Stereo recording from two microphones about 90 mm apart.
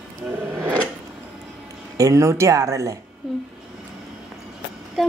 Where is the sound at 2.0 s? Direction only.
35° right (ahead or behind).